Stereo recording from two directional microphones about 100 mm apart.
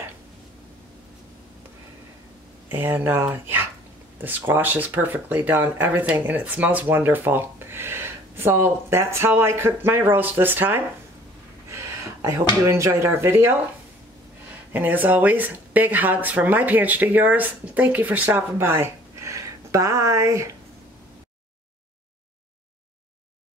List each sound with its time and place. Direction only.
2.7 s speech: 20° right (ahead or behind)
11.7 s a sound: 30° right (ahead or behind)
12.6 s speech: 30° right (ahead or behind)
14.7 s speech: 15° right (ahead or behind)